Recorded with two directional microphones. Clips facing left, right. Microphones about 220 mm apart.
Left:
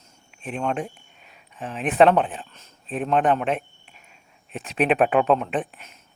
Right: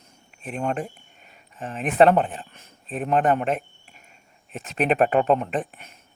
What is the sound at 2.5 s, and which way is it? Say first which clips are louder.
Speech: right 1 dB; 55° right (ahead or behind).